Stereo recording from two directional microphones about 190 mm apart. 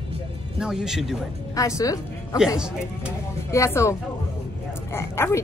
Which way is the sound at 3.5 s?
15° left (ahead or behind).